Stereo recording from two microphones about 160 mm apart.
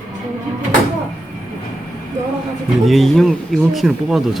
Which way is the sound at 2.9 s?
Centre (ahead or behind).